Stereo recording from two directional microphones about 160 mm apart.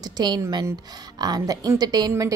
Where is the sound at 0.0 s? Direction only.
25° right (ahead or behind).